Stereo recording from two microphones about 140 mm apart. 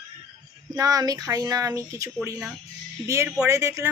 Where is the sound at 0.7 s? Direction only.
25° right (ahead or behind).